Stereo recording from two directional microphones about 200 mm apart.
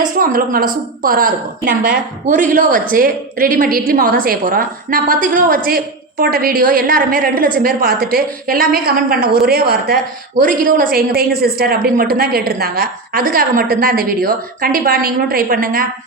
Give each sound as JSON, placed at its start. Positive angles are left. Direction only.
{"t": 0.0, "sound": "a woman's voice", "side_deg": -45}